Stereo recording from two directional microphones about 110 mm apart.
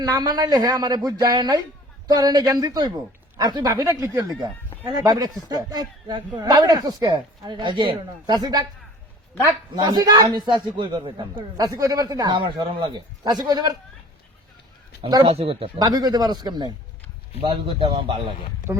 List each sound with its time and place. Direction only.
0.0 s a man's voice: 35° right (ahead or behind)
11.5 s a man's voice: 30° right (ahead or behind)
15.3 s speech: 60° right (ahead or behind)
15.8 s a man's voice: 35° right (ahead or behind)
17.4 s a man's voice: 50° right (ahead or behind)